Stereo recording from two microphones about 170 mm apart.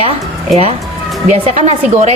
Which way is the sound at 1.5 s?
40° right (ahead or behind).